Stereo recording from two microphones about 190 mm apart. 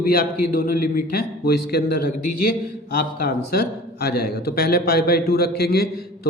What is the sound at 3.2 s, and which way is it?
A man's voice, 55° left (ahead or behind).